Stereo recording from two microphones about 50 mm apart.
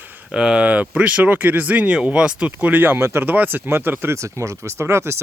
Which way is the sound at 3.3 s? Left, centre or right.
Right.